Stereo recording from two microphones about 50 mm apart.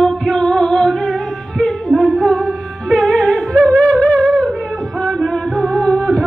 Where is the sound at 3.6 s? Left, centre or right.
Left.